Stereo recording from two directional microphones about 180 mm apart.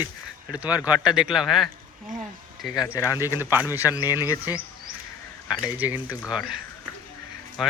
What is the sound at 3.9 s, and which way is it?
Speech, 20° left (ahead or behind).